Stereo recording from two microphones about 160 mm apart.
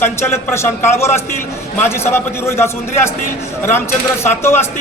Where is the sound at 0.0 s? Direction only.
15° left (ahead or behind).